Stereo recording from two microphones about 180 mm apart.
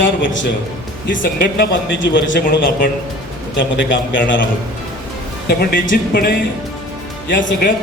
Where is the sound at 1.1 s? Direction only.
80° left.